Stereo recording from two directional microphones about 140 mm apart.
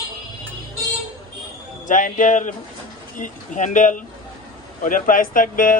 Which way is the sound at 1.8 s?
70° left (ahead or behind).